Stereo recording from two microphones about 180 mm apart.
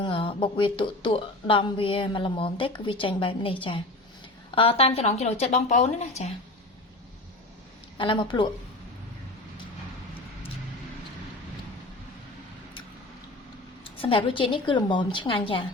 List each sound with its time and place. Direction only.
0.0 s a woman's voice: 30° left (ahead or behind)
7.9 s speech: 30° left (ahead or behind)
14.0 s speech: 30° left (ahead or behind)